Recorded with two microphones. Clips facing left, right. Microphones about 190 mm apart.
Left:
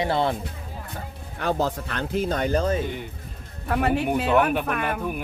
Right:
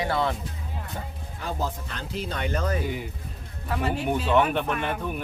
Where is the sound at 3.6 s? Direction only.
60° left (ahead or behind).